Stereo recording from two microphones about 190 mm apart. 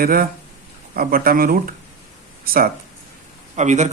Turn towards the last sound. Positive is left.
turn(degrees=-40)  # may be behind; listen again after turning